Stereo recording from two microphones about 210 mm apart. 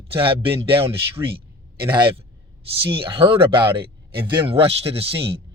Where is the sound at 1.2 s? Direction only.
15° right (ahead or behind).